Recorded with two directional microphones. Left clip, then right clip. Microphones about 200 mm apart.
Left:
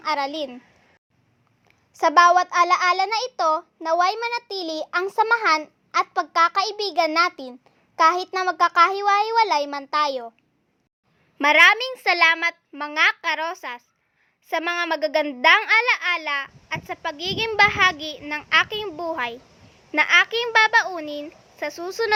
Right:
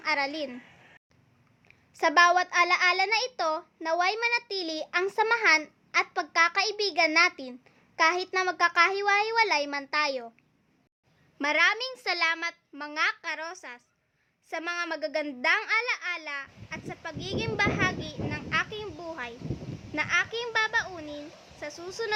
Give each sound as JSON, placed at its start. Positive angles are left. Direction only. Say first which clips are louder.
{"t": 0.0, "sound": "a child's voice", "louder": "left 4 dB", "side_deg": 20}
{"t": 1.6, "sound": "a child's voice", "louder": "left 6 dB", "side_deg": 20}
{"t": 11.3, "sound": "a child's voice", "louder": "left 10 dB", "side_deg": 15}